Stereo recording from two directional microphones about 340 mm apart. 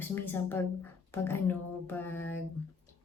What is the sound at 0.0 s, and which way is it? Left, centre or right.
Speech, centre.